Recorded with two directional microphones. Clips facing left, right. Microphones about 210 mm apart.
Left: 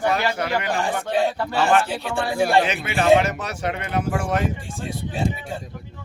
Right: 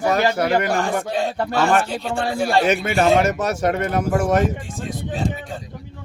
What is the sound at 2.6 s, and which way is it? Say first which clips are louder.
Speech: right 4 dB; 45° right (ahead or behind).